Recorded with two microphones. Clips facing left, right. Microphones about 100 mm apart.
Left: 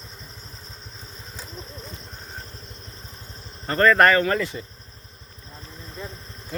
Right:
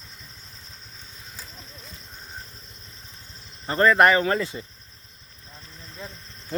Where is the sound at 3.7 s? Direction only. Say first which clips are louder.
Left 1 dB; 20° right (ahead or behind).